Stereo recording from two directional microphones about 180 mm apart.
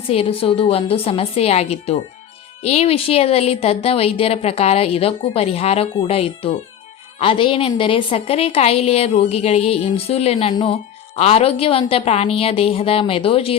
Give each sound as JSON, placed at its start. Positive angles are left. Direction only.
{"t": 0.1, "sound": "speech", "side_deg": 30}